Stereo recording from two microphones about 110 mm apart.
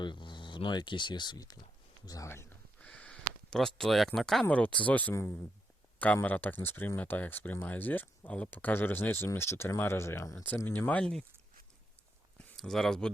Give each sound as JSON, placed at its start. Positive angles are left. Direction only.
{"t": 0.0, "sound": "speech", "side_deg": 45}
{"t": 2.0, "sound": "speech", "side_deg": 30}
{"t": 2.8, "sound": "a sound", "side_deg": 10}
{"t": 4.4, "sound": "speech", "side_deg": 15}
{"t": 6.2, "sound": "speech", "side_deg": 15}
{"t": 12.5, "sound": "speech", "side_deg": 0}